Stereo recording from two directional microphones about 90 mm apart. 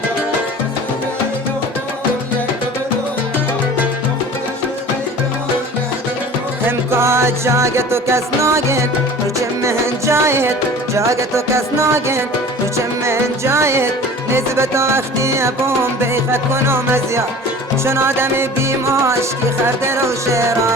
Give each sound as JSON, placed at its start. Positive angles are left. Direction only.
{"t": 6.7, "sound": "music", "side_deg": -30}
{"t": 19.6, "sound": "music", "side_deg": -30}